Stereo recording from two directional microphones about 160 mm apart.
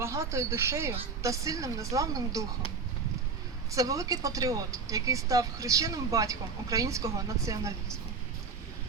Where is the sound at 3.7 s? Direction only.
20° right (ahead or behind).